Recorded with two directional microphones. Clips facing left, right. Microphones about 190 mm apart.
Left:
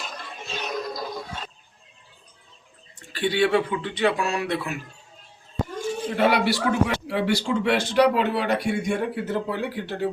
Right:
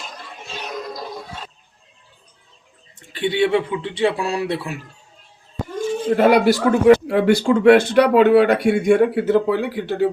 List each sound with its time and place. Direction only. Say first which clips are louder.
3.1 s speech: right 3 dB; 20° right (ahead or behind)
6.1 s speech: right 7 dB; 45° right (ahead or behind); by 10.1 s 90° right